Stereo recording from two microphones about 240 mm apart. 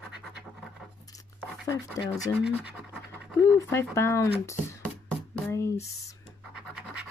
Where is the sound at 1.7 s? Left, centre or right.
Centre.